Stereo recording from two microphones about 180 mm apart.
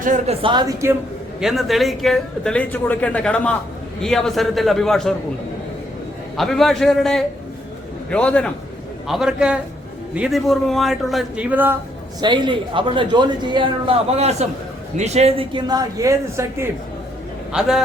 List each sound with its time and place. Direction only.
0.0 s speech: 45° right (ahead or behind)
0.4 s a man's voice: 25° right (ahead or behind)
1.4 s speech: centre (ahead or behind)
6.3 s speech: centre (ahead or behind)
12.2 s a man's voice: 25° right (ahead or behind)
17.5 s speech: 5° right (ahead or behind)